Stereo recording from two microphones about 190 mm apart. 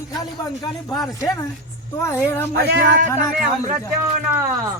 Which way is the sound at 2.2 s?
15° left (ahead or behind).